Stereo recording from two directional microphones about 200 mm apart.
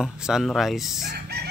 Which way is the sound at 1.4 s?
55° right (ahead or behind).